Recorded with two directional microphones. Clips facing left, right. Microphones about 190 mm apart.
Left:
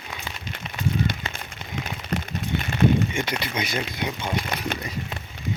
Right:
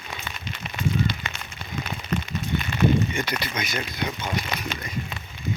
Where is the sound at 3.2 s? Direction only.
25° left (ahead or behind).